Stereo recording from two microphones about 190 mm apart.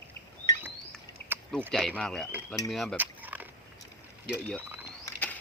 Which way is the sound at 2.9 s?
10° right (ahead or behind).